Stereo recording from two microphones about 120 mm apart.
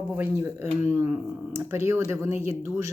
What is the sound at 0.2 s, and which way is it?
Speech, 20° right (ahead or behind).